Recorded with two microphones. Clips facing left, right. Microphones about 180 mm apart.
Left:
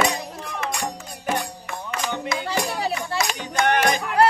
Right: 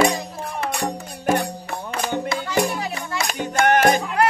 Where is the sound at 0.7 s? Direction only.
55° right (ahead or behind).